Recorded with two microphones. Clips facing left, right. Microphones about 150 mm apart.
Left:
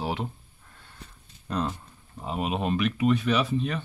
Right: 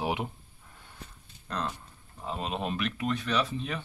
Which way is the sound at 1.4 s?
10° left (ahead or behind).